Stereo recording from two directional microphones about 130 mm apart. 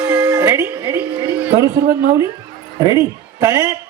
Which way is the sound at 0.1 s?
25° right (ahead or behind).